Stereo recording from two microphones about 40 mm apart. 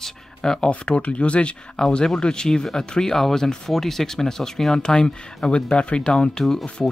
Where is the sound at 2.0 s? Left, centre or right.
Centre.